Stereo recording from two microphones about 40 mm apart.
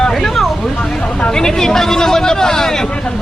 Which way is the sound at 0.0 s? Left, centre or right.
Centre.